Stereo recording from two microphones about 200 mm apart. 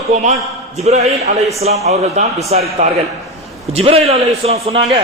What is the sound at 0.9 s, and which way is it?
A man's voice, 35° right (ahead or behind).